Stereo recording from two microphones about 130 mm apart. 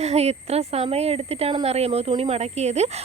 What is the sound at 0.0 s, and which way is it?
A woman's voice, 55° right (ahead or behind).